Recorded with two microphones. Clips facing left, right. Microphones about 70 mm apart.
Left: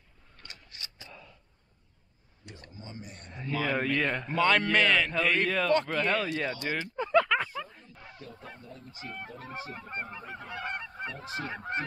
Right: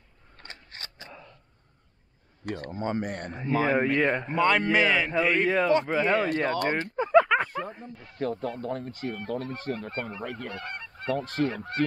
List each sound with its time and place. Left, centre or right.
0.4 s mechanisms: right
2.4 s speech: right
3.3 s speech: right
4.3 s a man's voice: centre
6.2 s speech: right
7.0 s a sound: centre
7.4 s speech: right
9.4 s speech: centre
10.5 s goose: centre
11.1 s speech: right